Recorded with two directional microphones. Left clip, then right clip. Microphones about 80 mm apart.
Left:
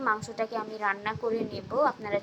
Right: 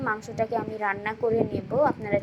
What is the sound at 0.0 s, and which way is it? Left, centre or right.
A woman's voice, right.